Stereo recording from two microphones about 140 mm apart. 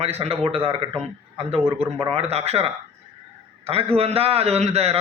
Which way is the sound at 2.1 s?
45° right (ahead or behind).